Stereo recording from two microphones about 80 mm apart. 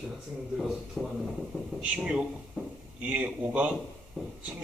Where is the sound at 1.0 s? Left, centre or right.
Centre.